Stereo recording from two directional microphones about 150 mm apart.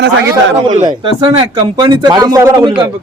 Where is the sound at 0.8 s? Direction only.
30° right (ahead or behind).